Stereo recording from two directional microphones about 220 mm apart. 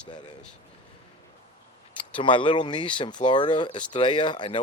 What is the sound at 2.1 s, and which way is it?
Speech, 20° left (ahead or behind).